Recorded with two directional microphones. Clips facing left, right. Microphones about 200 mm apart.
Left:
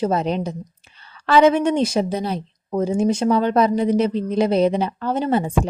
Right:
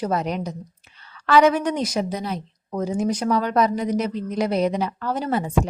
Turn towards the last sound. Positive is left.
turn(degrees=30)  # may be behind; listen again after turning